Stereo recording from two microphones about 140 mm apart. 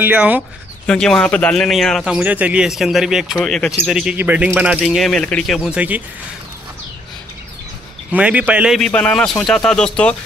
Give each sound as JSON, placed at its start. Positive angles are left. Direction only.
{"t": 0.0, "sound": "speech", "side_deg": -10}
{"t": 0.8, "sound": "a man's voice", "side_deg": 5}
{"t": 5.6, "sound": "speech", "side_deg": -10}
{"t": 8.1, "sound": "speech", "side_deg": -10}
{"t": 8.7, "sound": "a man's voice", "side_deg": 5}